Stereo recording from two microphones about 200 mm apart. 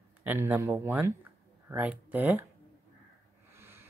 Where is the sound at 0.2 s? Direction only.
10° right (ahead or behind).